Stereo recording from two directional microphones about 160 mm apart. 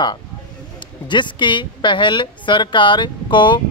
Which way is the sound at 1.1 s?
30° left (ahead or behind).